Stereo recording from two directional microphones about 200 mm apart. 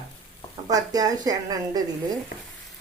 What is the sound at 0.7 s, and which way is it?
Speech, 20° right (ahead or behind).